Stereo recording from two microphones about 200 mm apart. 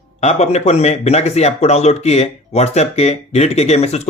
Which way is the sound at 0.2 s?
35° left (ahead or behind).